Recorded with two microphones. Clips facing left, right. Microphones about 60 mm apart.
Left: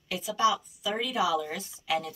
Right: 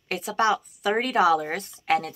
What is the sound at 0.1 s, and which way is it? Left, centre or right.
Speech, right.